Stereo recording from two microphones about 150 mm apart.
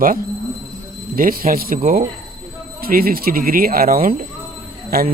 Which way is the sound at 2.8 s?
75° right (ahead or behind).